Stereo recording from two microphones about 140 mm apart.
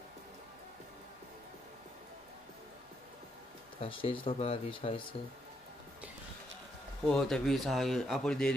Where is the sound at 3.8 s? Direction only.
40° left (ahead or behind).